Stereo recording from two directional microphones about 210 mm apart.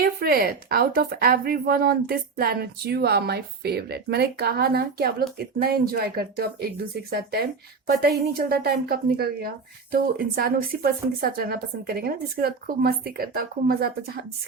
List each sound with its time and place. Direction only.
0.0 s a woman's voice: 45° right (ahead or behind)